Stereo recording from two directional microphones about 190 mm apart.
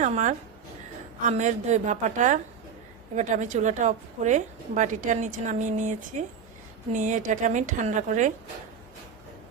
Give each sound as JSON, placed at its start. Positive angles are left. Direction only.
{"t": 0.0, "sound": "a woman's voice", "side_deg": -40}